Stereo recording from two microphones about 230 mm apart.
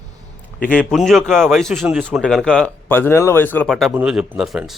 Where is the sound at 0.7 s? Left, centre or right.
Centre.